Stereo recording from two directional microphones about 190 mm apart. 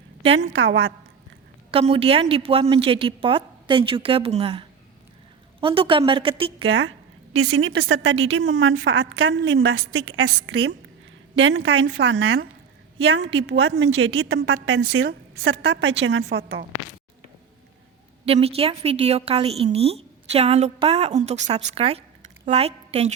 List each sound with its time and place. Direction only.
0.3 s a woman's voice: 70° right (ahead or behind)
1.7 s a woman's voice: 30° right (ahead or behind)
6.7 s a woman's voice: 90° right
10.4 s a woman's voice: 90° right
15.6 s a woman's voice: 70° right (ahead or behind)
18.3 s a woman's voice: 30° right (ahead or behind)